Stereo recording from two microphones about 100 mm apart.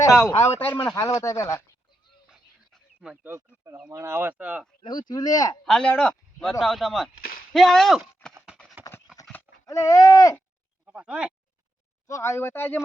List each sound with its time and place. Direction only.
0.3 s speech: 25° left (ahead or behind)
0.9 s speech: 35° left (ahead or behind)
2.3 s a sound: 5° right (ahead or behind)
3.8 s speech: 30° right (ahead or behind); by 4.6 s 15° right (ahead or behind)
4.8 s speech: 50° left (ahead or behind)
5.6 s speech: 10° left (ahead or behind)
8.8 s clip-clop: 20° right (ahead or behind)
9.6 s speech: 35° left (ahead or behind)
10.8 s speech: 10° right (ahead or behind)
12.0 s speech: 30° left (ahead or behind)